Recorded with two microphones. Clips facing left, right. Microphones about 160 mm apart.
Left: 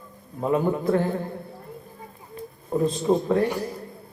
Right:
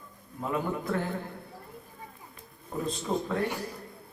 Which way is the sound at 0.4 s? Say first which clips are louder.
Left 8 dB; 30° left (ahead or behind).